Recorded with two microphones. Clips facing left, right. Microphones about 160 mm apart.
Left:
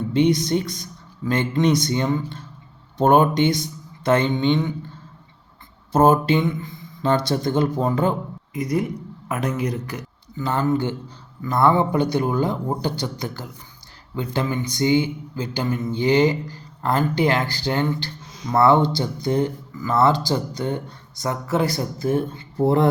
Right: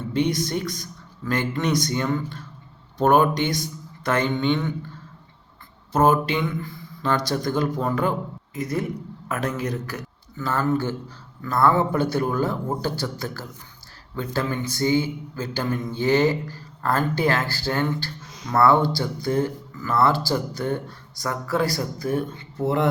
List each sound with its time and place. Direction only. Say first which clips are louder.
0.1 s speech: left 4 dB; 20° left (ahead or behind)
5.9 s speech: left 3 dB; 30° left (ahead or behind)
9.9 s speech: left 2 dB; 20° left (ahead or behind)
22.5 s speech: left 4 dB; 35° left (ahead or behind)